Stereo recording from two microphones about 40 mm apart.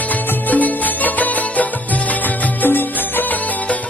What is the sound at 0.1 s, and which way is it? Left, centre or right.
Music, left.